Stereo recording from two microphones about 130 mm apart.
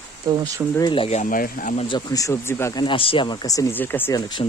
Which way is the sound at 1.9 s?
25° left (ahead or behind).